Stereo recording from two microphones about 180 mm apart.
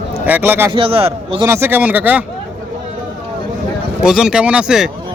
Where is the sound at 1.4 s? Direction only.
15° right (ahead or behind).